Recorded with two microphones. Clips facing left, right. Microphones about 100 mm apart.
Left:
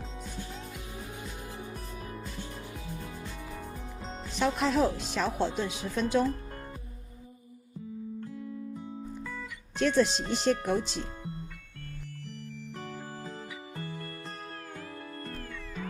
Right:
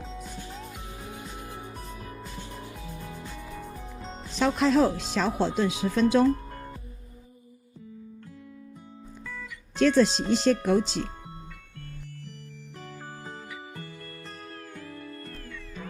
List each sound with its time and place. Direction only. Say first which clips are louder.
4.0 s music: left 1 dB; centre (ahead or behind)
4.4 s speech: right 5 dB; 90° right
9.7 s speech: right 5 dB; 90° right